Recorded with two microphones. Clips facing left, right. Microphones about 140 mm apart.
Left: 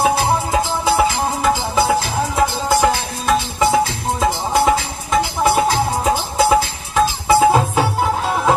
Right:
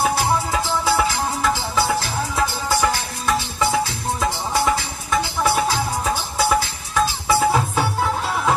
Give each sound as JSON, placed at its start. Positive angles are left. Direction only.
{"t": 0.0, "sound": "music", "side_deg": 20}